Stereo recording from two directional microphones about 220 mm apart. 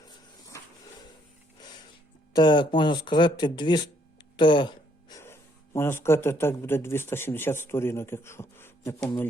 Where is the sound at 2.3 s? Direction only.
20° left (ahead or behind).